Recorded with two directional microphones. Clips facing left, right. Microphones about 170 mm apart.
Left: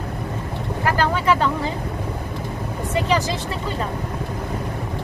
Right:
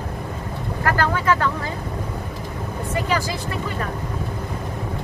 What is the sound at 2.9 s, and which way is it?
Vehicle, 20° left (ahead or behind).